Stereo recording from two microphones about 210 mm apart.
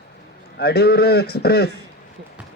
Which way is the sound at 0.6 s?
50° left (ahead or behind).